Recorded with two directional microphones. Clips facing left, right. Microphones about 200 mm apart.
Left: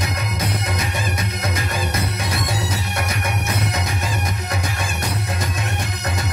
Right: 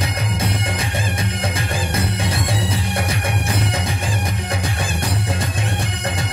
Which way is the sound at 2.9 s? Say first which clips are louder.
Right 2 dB; 30° right (ahead or behind).